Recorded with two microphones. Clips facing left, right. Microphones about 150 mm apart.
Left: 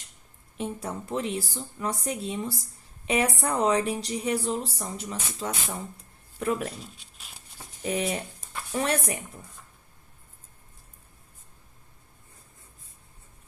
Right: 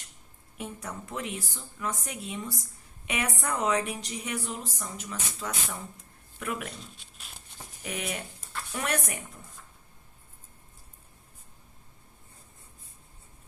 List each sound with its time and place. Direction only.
0.5 s a woman's voice: 30° left (ahead or behind)
6.7 s speech: 5° left (ahead or behind)
7.8 s a woman's voice: 35° left (ahead or behind)